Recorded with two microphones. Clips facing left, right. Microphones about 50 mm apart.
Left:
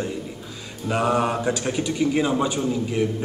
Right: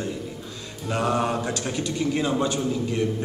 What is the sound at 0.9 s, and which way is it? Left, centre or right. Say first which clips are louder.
A man's voice: left 2 dB; centre.